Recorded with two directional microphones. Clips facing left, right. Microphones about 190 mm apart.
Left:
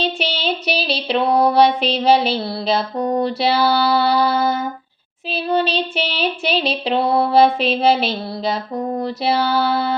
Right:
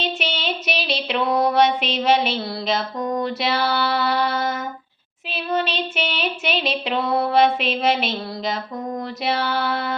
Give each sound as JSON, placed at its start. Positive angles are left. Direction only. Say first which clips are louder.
{"t": 0.0, "sound": "female singing", "louder": "left 4 dB", "side_deg": 35}
{"t": 5.3, "sound": "child singing", "louder": "left 5 dB", "side_deg": 30}